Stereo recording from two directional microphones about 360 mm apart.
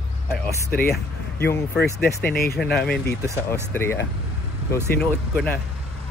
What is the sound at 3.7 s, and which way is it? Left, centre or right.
Speech, centre.